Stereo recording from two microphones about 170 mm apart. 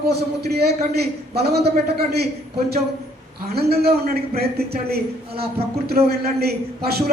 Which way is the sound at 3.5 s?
65° right (ahead or behind).